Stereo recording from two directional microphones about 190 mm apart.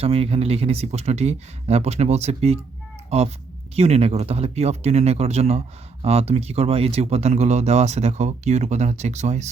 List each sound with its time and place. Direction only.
0.0 s speech: 30° right (ahead or behind)